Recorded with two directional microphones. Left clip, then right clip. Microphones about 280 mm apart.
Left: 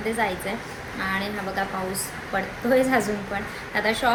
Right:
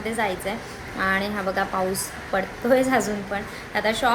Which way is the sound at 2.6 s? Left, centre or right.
Centre.